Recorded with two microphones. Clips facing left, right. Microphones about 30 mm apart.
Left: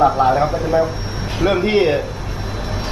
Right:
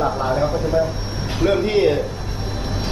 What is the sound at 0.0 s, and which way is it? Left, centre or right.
A man's voice, left.